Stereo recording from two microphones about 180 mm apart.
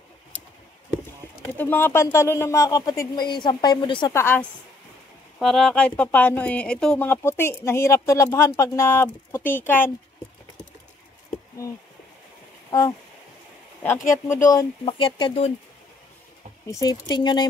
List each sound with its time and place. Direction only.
1.6 s speech: 10° left (ahead or behind)
4.1 s speech: 10° left (ahead or behind)
5.4 s speech: centre (ahead or behind)
14.1 s speech: 15° left (ahead or behind); by 15.5 s 30° left (ahead or behind)
16.6 s speech: 20° left (ahead or behind)